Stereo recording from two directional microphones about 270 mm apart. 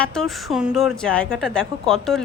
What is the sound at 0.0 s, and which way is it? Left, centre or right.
Speech, centre.